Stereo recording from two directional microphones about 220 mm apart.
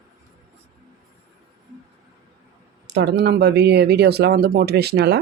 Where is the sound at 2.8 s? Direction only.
50° right (ahead or behind).